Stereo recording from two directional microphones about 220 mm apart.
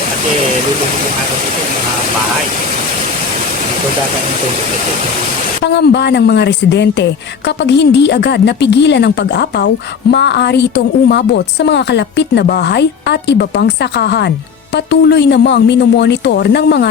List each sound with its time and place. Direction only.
5.6 s a woman's voice: 50° left (ahead or behind)